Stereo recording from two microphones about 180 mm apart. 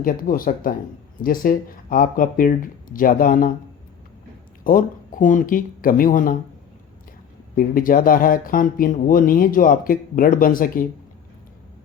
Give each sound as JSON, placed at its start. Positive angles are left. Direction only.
{"t": 0.0, "sound": "speech", "side_deg": 50}
{"t": 4.6, "sound": "speech", "side_deg": 50}
{"t": 7.5, "sound": "speech", "side_deg": 50}